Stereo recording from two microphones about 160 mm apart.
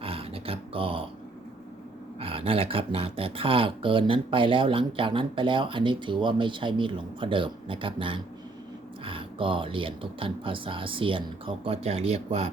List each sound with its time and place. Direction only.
0.0 s dog: 35° right (ahead or behind)
2.2 s speech: 35° right (ahead or behind)